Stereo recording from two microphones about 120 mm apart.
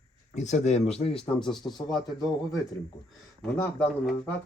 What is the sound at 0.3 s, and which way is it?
Speech, 70° left (ahead or behind).